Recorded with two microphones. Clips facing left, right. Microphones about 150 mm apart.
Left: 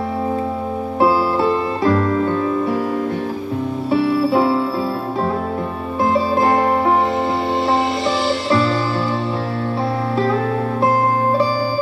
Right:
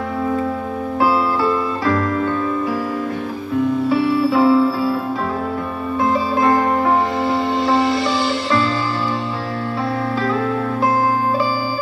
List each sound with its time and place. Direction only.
0.9 s music: 25° left (ahead or behind)
4.3 s music: 25° left (ahead or behind)
6.0 s music: 25° left (ahead or behind)
7.6 s music: 30° left (ahead or behind)